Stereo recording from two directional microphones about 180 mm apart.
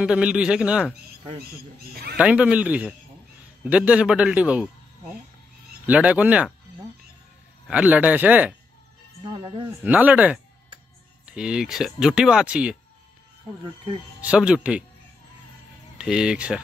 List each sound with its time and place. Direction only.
0.0 s speech: 5° right (ahead or behind)
2.1 s a man's voice: 5° right (ahead or behind)
5.9 s a man's voice: 5° right (ahead or behind)
7.6 s a man's voice: 10° right (ahead or behind)
9.2 s speech: 25° right (ahead or behind)
9.8 s a man's voice: 10° right (ahead or behind)
14.2 s a man's voice: 5° right (ahead or behind)
16.0 s speech: 5° right (ahead or behind)